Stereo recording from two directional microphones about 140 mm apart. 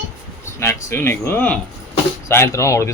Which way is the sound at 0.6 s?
20° left (ahead or behind).